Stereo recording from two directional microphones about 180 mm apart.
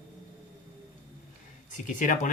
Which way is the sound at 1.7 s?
45° left (ahead or behind).